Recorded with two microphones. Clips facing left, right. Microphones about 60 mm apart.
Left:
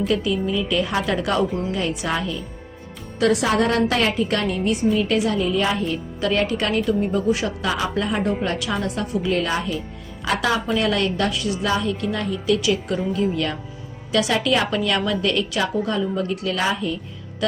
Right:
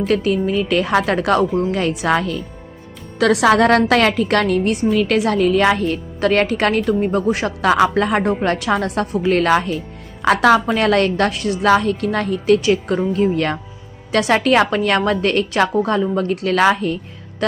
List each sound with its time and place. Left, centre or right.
0.0 s a woman's voice: right
3.2 s a woman's voice: right
8.3 s a woman's voice: right
11.7 s a woman's voice: right